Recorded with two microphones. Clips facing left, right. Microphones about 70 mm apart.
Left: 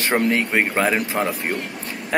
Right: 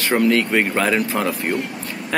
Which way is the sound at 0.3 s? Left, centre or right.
Left.